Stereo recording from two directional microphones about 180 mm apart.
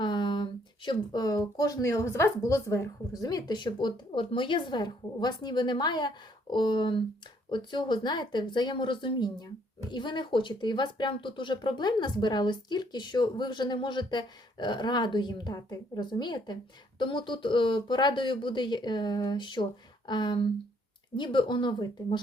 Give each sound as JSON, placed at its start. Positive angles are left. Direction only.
{"t": 0.0, "sound": "speech", "side_deg": 25}